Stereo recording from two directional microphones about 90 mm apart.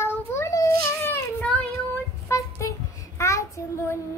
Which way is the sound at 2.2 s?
35° left (ahead or behind).